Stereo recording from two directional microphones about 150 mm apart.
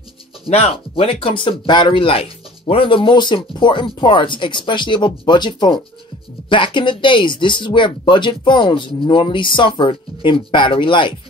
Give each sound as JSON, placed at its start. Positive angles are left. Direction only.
{"t": 0.5, "sound": "speech", "side_deg": 40}